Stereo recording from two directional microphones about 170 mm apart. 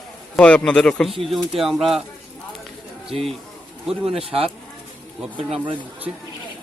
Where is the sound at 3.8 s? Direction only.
5° right (ahead or behind).